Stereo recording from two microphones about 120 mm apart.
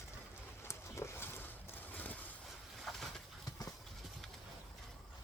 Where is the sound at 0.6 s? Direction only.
25° left (ahead or behind).